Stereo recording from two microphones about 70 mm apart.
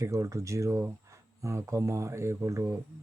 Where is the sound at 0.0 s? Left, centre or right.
Right.